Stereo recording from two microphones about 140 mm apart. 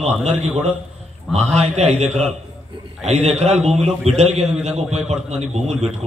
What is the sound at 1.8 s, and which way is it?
A man's voice, 50° right (ahead or behind).